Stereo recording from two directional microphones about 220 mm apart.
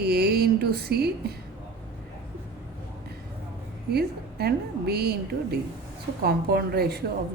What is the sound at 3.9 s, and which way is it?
A woman's voice, 45° right (ahead or behind).